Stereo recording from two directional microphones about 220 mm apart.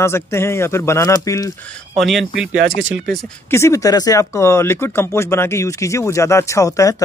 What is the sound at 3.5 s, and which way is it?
Speech, 15° left (ahead or behind).